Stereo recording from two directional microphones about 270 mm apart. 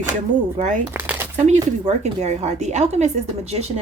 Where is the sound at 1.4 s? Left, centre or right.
Right.